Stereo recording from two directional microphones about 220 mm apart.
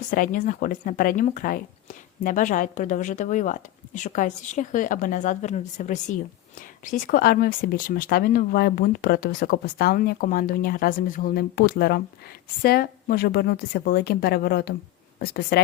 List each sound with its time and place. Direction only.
0.1 s a woman's voice: 40° left (ahead or behind)